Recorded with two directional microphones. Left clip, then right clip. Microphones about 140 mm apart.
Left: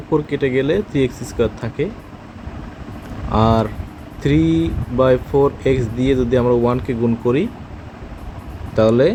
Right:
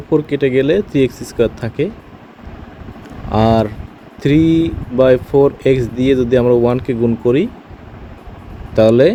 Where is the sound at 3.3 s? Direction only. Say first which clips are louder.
Right 3 dB; 45° right (ahead or behind).